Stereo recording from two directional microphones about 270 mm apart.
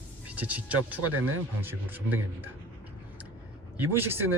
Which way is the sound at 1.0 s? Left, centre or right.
Right.